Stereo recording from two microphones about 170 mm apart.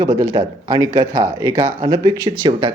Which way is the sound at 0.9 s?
35° right (ahead or behind).